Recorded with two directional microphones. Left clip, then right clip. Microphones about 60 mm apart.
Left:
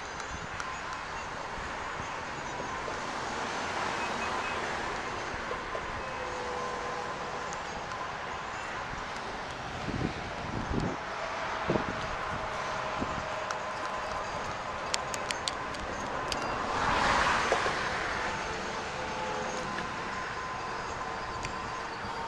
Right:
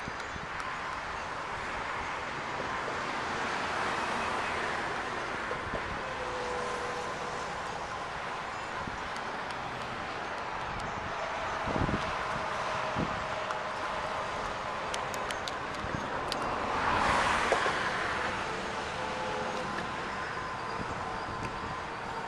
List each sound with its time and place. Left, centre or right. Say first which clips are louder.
16.8 s vehicle: left 1 dB; left
17.1 s vehicle: left 1 dB; left
17.6 s a sound: right 1 dB; centre